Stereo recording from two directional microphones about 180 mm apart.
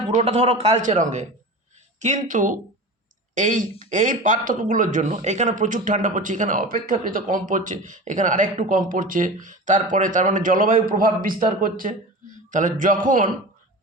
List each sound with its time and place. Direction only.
0.1 s a man's voice: 30° right (ahead or behind)